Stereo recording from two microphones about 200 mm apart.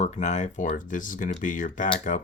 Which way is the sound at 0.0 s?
35° left (ahead or behind).